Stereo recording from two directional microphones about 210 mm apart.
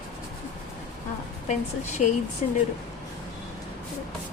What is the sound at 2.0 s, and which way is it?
Speech, 35° left (ahead or behind).